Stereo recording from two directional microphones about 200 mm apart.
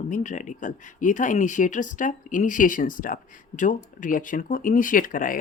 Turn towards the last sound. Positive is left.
turn(degrees=45)  # may be behind; listen again after turning